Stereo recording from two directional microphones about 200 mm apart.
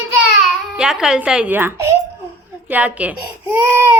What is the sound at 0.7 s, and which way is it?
A woman's voice, 5° right (ahead or behind).